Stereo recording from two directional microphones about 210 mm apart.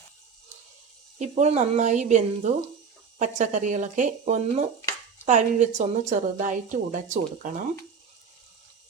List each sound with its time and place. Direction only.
1.2 s a woman's voice: 30° right (ahead or behind)